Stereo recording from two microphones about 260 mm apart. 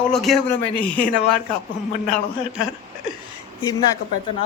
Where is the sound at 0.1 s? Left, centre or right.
Centre.